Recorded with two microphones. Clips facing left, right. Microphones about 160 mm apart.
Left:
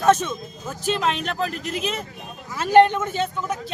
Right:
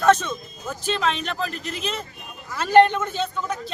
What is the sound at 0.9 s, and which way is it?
Speech, 5° left (ahead or behind).